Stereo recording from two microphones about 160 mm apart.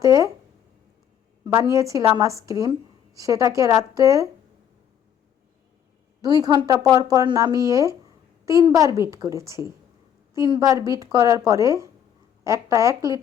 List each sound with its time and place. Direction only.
0.0 s speech: 20° right (ahead or behind)
1.7 s speech: 20° right (ahead or behind)
6.2 s speech: 25° right (ahead or behind)